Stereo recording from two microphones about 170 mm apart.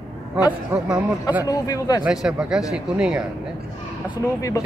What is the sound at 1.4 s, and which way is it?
Speech, 20° left (ahead or behind).